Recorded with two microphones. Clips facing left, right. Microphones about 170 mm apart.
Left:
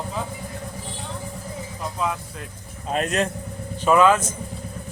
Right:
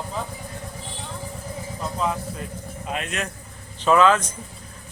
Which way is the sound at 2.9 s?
40° left (ahead or behind).